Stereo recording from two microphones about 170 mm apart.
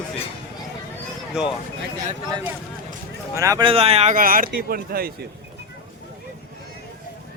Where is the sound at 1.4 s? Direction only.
5° right (ahead or behind).